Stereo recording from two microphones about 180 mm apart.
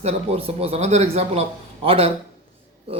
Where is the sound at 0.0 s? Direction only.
35° right (ahead or behind).